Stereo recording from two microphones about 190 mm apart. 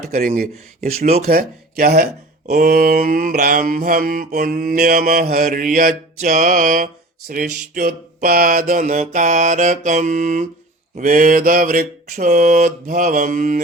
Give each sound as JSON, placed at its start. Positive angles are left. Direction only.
{"t": 0.1, "sound": "mantra", "side_deg": -45}